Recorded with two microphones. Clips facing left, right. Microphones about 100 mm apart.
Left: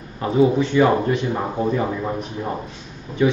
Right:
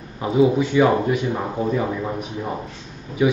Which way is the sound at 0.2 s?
10° right (ahead or behind).